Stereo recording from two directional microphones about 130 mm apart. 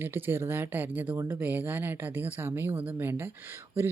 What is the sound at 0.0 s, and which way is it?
Speech, 15° right (ahead or behind).